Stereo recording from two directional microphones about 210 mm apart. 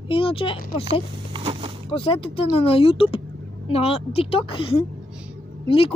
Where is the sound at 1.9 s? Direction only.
25° left (ahead or behind).